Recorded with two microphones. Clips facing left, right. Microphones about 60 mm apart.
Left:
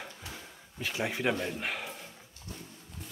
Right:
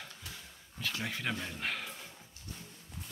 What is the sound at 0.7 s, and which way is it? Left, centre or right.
Speech, centre.